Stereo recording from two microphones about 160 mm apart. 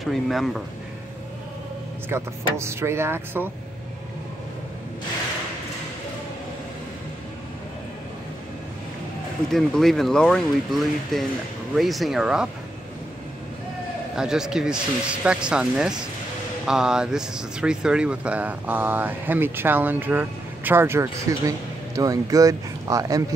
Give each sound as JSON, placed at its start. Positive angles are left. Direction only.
{"t": 0.0, "sound": "speech", "side_deg": 0}
{"t": 2.0, "sound": "speech", "side_deg": -15}
{"t": 9.5, "sound": "speech", "side_deg": 0}
{"t": 14.1, "sound": "speech", "side_deg": -5}